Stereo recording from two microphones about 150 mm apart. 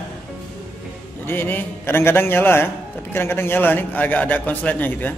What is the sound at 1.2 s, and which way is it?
A man's voice, 15° left (ahead or behind).